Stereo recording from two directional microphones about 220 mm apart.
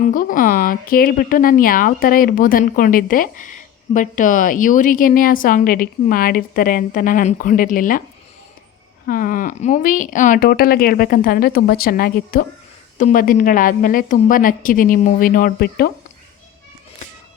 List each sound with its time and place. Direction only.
0.1 s speech: 40° left (ahead or behind)
9.0 s speech: 40° left (ahead or behind)